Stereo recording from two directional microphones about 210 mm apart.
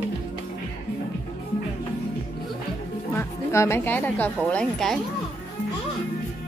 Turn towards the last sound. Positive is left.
turn(degrees=0)  # may be behind; listen again after turning